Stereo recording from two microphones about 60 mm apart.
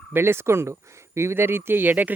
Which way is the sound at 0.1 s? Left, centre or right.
Right.